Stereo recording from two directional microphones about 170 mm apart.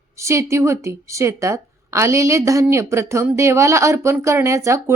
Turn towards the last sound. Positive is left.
turn(degrees=-15)  # may be behind; listen again after turning